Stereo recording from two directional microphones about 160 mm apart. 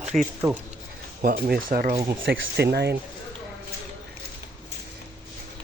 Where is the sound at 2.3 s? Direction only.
90° right.